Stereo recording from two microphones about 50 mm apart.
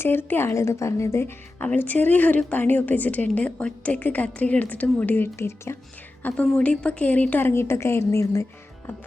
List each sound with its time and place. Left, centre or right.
0.0 s speech: left
1.6 s a woman's voice: left
5.4 s a woman's voice: left
6.2 s a woman's voice: left
7.5 s a woman's voice: left